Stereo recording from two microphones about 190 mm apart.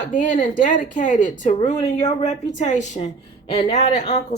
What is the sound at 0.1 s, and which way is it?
A woman's voice, 45° left (ahead or behind).